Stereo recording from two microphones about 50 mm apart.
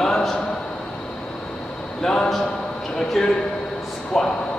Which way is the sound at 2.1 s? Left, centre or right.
Centre.